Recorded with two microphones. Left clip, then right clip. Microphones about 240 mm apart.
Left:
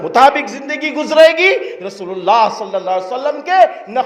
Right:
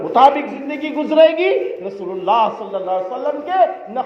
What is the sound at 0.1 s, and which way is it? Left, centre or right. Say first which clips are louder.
A woman's voice: left 2 dB; left.